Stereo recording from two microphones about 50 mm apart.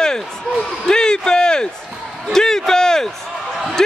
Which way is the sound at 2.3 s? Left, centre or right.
Centre.